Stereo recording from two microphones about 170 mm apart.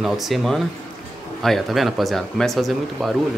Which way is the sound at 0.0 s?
Centre (ahead or behind).